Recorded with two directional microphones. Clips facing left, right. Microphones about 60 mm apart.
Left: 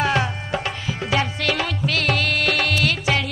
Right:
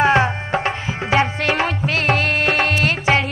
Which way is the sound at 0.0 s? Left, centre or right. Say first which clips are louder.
Right 6 dB; right.